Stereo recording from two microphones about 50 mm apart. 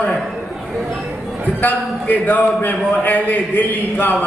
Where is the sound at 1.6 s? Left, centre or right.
Left.